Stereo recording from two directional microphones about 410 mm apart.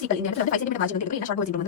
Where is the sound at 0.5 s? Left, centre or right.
Centre.